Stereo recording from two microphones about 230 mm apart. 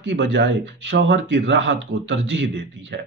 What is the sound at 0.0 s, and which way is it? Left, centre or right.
Speech, right.